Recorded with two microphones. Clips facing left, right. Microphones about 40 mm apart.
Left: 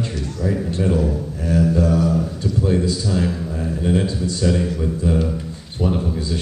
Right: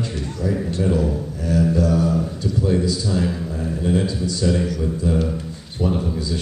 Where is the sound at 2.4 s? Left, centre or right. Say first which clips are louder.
Left 1 dB; centre.